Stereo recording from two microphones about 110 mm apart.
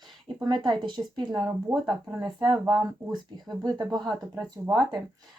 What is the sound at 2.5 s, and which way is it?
Speech, 40° right (ahead or behind).